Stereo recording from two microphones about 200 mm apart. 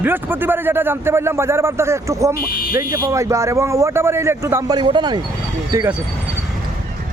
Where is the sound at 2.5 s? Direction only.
45° left (ahead or behind).